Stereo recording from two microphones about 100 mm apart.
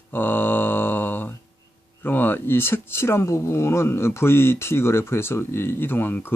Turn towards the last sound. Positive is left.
turn(degrees=20)  # may be behind; listen again after turning